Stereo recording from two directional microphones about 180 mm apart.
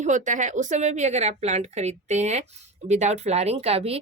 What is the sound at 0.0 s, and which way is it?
A woman's voice, 40° right (ahead or behind).